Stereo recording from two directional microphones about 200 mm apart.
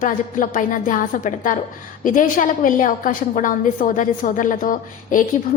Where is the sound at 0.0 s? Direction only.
40° left (ahead or behind).